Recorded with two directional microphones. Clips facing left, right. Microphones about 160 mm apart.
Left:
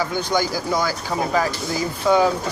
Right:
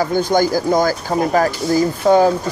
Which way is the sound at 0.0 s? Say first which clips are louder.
Right 6 dB; 45° right (ahead or behind).